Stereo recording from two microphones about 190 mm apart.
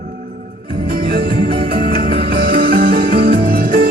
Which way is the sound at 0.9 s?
55° right (ahead or behind).